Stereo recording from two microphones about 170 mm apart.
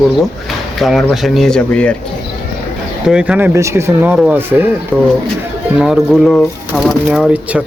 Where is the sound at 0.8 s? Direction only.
Centre (ahead or behind).